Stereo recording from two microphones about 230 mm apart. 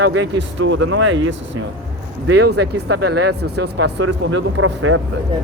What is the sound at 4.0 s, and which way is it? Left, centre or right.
Speech, right.